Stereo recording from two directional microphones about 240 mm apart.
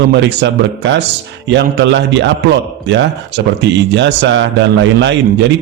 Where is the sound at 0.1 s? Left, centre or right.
Right.